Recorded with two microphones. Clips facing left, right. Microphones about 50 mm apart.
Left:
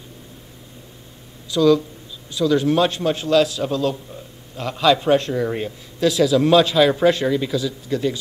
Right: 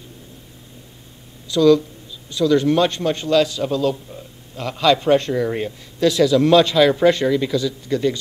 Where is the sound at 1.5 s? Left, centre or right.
Centre.